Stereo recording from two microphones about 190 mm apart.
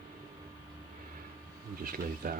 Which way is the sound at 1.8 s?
50° right (ahead or behind).